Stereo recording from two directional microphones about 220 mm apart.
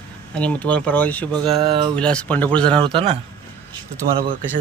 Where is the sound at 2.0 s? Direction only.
5° left (ahead or behind).